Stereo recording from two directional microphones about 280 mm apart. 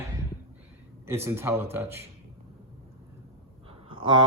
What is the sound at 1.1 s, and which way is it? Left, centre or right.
Speech, centre.